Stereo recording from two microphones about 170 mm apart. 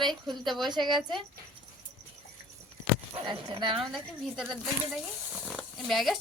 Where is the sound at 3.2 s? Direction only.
30° right (ahead or behind).